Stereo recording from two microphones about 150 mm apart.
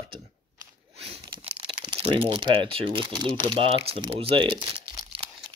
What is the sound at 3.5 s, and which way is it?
Speech, 40° right (ahead or behind).